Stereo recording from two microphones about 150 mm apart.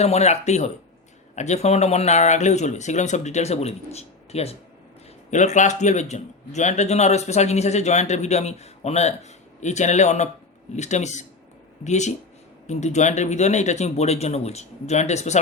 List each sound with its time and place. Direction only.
0.0 s speech: 45° left (ahead or behind)